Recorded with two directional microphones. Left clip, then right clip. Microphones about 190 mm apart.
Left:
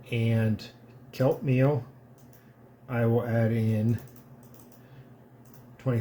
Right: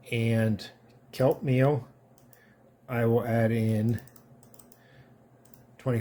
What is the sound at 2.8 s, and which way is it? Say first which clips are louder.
Speech: right 1 dB; 40° right (ahead or behind).